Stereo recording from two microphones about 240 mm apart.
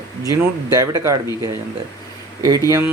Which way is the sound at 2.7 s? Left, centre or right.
Centre.